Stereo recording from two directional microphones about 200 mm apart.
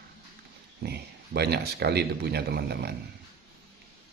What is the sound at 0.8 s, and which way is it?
Speech, 55° right (ahead or behind).